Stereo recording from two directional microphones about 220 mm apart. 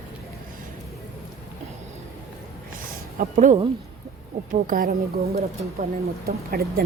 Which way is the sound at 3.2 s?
35° right (ahead or behind).